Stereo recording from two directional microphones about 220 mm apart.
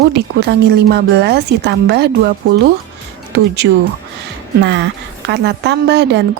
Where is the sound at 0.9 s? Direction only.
50° right (ahead or behind).